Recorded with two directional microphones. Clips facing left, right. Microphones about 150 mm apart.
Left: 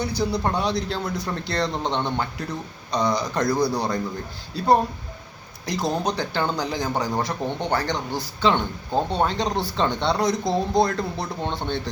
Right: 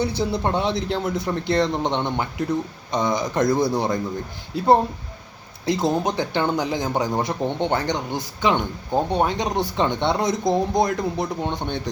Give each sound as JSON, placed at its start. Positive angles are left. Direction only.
{"t": 0.0, "sound": "speech", "side_deg": -25}